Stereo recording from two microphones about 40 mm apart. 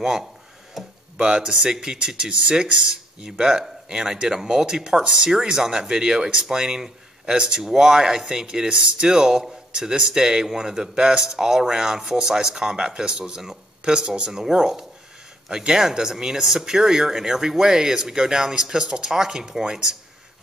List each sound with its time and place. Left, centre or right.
0.8 s tick-tock: centre
1.1 s speech: right